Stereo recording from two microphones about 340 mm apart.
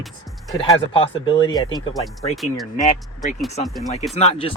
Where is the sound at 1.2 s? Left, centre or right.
Centre.